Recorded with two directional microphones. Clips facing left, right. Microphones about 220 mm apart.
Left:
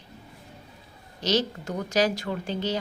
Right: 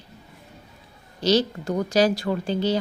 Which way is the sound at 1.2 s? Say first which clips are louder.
Right 5 dB; 30° right (ahead or behind).